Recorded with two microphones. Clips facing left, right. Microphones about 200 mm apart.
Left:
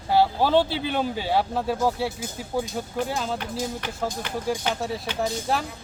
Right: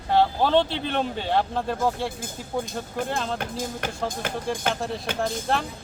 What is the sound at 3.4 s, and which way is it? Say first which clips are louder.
Speech: even; 45° right (ahead or behind).